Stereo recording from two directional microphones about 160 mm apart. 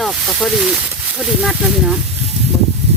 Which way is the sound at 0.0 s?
Centre (ahead or behind).